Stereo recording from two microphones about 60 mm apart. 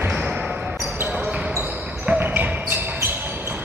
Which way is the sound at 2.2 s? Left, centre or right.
Right.